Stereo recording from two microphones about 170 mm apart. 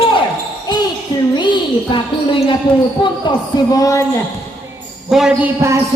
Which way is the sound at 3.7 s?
20° left (ahead or behind).